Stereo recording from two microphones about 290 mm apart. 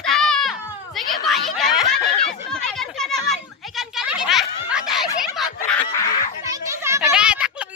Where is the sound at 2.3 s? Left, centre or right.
Centre.